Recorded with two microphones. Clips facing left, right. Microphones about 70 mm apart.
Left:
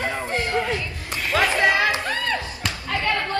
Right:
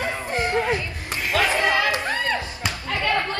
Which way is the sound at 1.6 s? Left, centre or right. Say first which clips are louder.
Left 2 dB; left.